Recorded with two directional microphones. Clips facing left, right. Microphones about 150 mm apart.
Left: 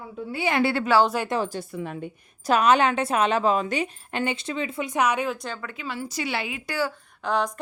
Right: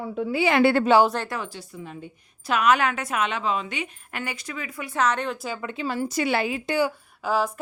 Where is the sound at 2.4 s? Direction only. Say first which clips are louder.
Left 2 dB; 35° left (ahead or behind); by 5.3 s 10° left (ahead or behind).